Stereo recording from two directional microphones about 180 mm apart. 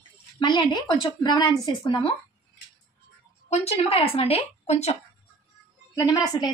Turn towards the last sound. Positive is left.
turn(degrees=20)  # may be behind; listen again after turning